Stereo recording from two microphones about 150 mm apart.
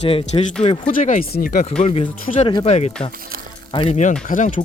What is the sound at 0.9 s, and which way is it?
Speech, 65° left (ahead or behind).